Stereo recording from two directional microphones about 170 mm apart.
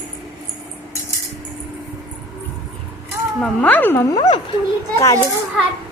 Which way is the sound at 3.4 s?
10° left (ahead or behind).